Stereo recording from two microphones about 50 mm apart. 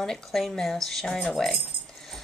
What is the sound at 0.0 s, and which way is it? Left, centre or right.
A woman's voice, centre.